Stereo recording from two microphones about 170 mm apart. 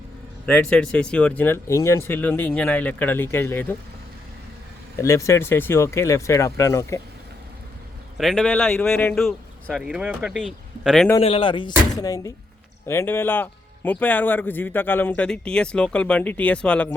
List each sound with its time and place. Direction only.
0.4 s speech: 5° left (ahead or behind)
4.9 s speech: 20° left (ahead or behind)
8.2 s a man's voice: 5° left (ahead or behind)
11.2 s speech: 30° left (ahead or behind); by 16.9 s 5° left (ahead or behind)